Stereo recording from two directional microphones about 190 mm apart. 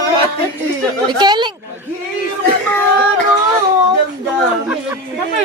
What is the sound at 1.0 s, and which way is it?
Speech, 20° right (ahead or behind).